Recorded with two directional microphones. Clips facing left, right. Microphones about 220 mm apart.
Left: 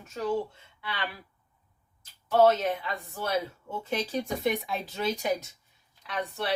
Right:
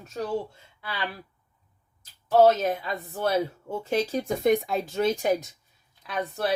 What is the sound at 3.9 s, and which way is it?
Speech, 45° right (ahead or behind).